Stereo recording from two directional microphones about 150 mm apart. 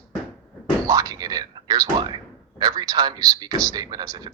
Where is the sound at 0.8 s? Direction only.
25° right (ahead or behind).